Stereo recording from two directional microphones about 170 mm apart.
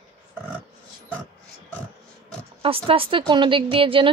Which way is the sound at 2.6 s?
35° right (ahead or behind).